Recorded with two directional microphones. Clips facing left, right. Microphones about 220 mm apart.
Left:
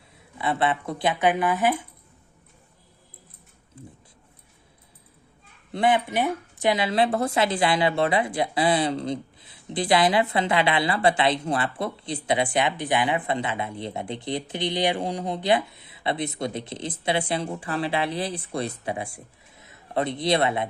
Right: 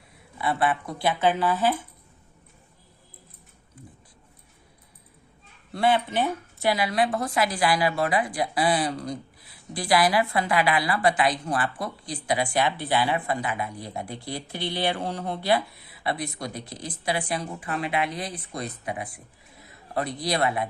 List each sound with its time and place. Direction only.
0.3 s speech: 25° left (ahead or behind)
3.8 s a sound: 25° left (ahead or behind)
5.7 s speech: 15° left (ahead or behind)